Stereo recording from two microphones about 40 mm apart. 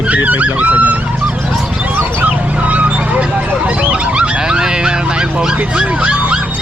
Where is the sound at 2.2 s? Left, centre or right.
Right.